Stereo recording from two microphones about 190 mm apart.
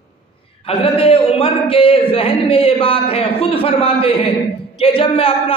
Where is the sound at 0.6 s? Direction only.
30° left (ahead or behind).